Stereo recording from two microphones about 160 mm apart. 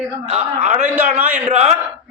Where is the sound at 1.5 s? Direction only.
45° right (ahead or behind).